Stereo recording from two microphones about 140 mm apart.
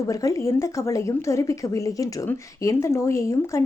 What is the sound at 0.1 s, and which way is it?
A woman's voice, 25° left (ahead or behind).